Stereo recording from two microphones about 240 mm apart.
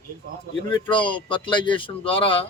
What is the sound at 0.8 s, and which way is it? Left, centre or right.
Speech, centre.